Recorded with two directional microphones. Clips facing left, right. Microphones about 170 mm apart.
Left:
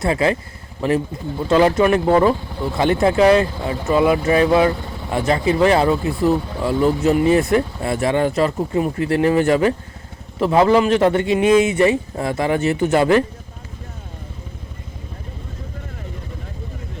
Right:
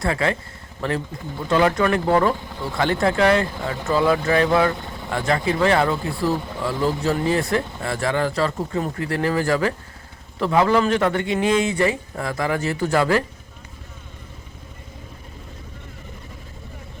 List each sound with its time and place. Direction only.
0.0 s speech: 20° left (ahead or behind)